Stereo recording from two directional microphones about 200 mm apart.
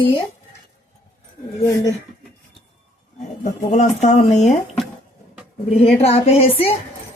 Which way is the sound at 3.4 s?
35° left (ahead or behind).